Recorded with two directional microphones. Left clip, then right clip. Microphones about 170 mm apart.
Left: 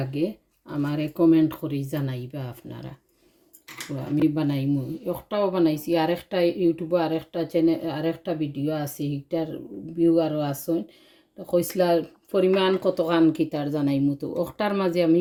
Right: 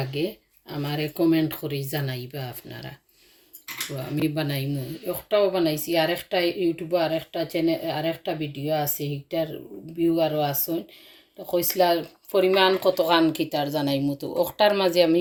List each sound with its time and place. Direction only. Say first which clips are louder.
0.1 s speech: left 3 dB; 60° left (ahead or behind)
4.4 s speech: left 3 dB; 70° left (ahead or behind)
11.5 s speech: even; 70° left (ahead or behind); by 15.2 s 55° left (ahead or behind)